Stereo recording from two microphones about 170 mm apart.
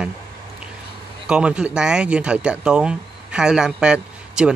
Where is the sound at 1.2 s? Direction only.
5° right (ahead or behind).